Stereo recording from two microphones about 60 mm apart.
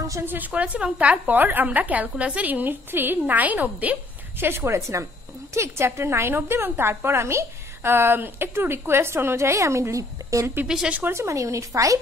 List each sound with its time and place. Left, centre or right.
0.2 s a woman's voice: right
0.5 s a woman's voice: centre
4.4 s a woman's voice: right
10.7 s speech: centre
11.1 s speech: right